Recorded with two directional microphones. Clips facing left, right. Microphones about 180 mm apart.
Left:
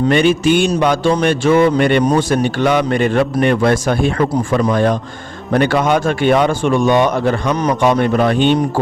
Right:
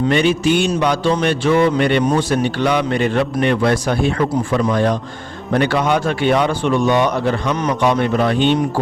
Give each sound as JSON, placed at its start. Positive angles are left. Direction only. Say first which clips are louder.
{"t": 0.1, "sound": "speech", "louder": "left 3 dB", "side_deg": 55}